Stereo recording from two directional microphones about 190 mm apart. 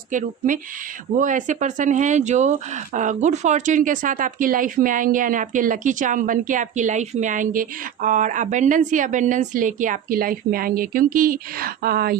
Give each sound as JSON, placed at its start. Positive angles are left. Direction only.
{"t": 0.1, "sound": "speech", "side_deg": -45}